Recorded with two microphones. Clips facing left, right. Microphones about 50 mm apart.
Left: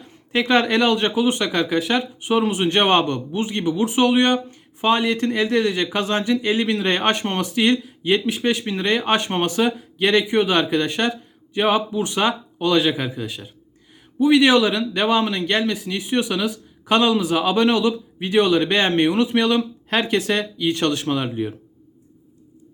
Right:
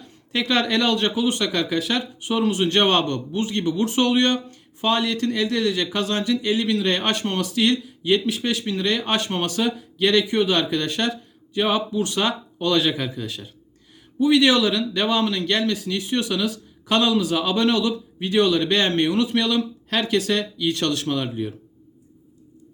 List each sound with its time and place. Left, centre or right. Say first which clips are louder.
0.0 s speech: left 4 dB; left